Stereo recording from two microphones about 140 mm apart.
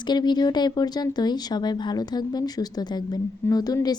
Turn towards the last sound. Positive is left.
turn(degrees=30)  # may be behind; listen again after turning